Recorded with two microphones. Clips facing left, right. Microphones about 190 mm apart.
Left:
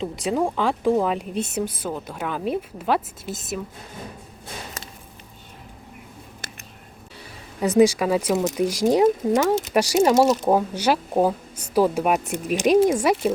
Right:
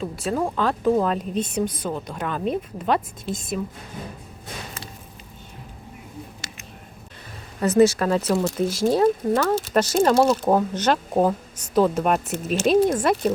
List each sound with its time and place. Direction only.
0.0 s speech: 15° left (ahead or behind)
6.4 s a sound: 55° left (ahead or behind)
7.6 s speech: 15° left (ahead or behind)